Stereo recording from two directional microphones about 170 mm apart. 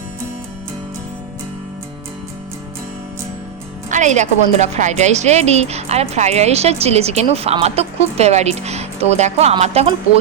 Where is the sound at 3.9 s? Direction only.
45° right (ahead or behind).